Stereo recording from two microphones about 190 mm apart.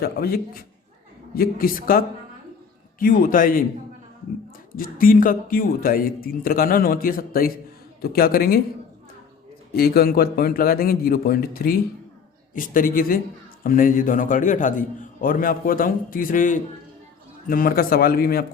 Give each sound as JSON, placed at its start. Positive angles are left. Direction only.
{"t": 0.0, "sound": "a man's voice", "side_deg": 50}
{"t": 4.7, "sound": "a man's voice", "side_deg": 50}
{"t": 9.7, "sound": "a man's voice", "side_deg": 50}